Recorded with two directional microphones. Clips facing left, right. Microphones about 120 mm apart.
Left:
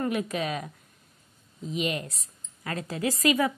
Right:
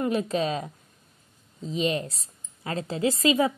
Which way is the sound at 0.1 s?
30° right (ahead or behind).